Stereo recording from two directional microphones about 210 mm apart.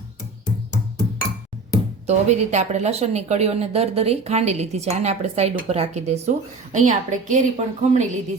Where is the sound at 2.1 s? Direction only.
35° right (ahead or behind).